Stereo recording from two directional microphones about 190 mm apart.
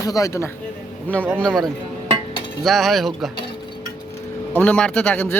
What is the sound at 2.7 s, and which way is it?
Speech, centre (ahead or behind).